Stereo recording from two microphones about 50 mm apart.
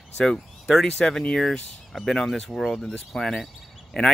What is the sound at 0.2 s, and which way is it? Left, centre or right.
Speech, centre.